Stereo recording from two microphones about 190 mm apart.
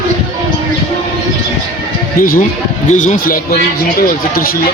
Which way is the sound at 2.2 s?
45° left (ahead or behind).